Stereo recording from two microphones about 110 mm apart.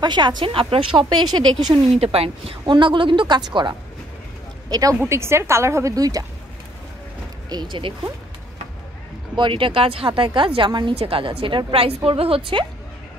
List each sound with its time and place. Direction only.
0.0 s speech: 40° right (ahead or behind)
2.1 s speech: 60° right (ahead or behind); by 4.9 s 35° right (ahead or behind)
5.0 s a woman's voice: 25° right (ahead or behind)
7.4 s speech: 40° right (ahead or behind)
9.3 s speech: 50° right (ahead or behind)
11.0 s a woman's voice: 55° right (ahead or behind)